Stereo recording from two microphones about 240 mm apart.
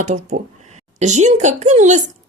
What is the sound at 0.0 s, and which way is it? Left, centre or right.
A woman's voice, right.